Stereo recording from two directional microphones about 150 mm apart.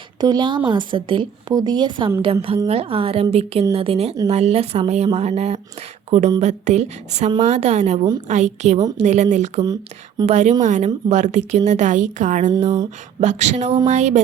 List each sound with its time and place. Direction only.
0.2 s a woman's voice: 30° right (ahead or behind); by 14.2 s 50° right (ahead or behind)